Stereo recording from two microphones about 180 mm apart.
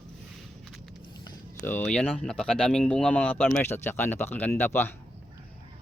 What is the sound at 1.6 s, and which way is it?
Speech, 10° left (ahead or behind).